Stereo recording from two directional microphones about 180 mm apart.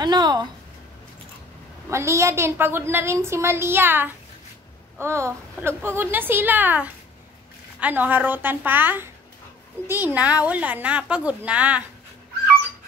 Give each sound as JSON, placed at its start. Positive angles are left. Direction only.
{"t": 0.0, "sound": "speech", "side_deg": -25}
{"t": 1.9, "sound": "a woman's voice", "side_deg": -15}